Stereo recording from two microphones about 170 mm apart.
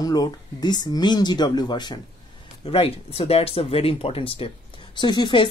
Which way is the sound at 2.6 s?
35° left (ahead or behind).